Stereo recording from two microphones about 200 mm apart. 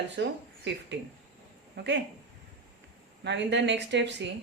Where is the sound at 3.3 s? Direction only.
60° right (ahead or behind).